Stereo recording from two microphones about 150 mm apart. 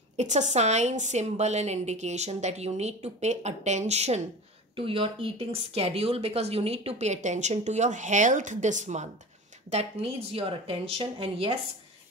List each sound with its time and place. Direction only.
0.2 s speech: 50° right (ahead or behind)
9.7 s speech: 40° right (ahead or behind)